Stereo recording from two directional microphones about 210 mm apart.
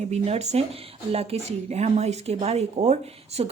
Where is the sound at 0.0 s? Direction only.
30° right (ahead or behind).